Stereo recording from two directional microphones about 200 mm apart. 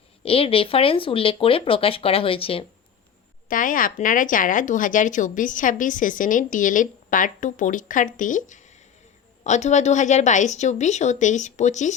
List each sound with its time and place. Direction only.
0.2 s speech: 30° left (ahead or behind)
3.5 s speech: 40° left (ahead or behind)